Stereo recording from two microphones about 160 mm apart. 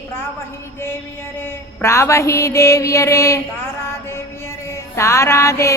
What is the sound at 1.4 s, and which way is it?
Mantra, 15° left (ahead or behind).